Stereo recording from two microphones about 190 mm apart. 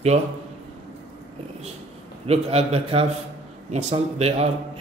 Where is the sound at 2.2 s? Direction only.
30° right (ahead or behind).